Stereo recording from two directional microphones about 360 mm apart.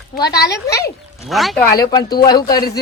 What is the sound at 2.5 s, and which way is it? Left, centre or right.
Speech, left.